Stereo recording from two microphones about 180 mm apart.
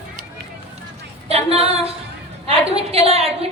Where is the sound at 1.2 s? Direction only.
35° right (ahead or behind).